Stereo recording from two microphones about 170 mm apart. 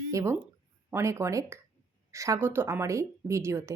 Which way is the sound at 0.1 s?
20° right (ahead or behind).